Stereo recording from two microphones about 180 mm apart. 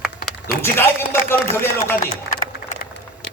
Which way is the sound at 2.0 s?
50° left (ahead or behind).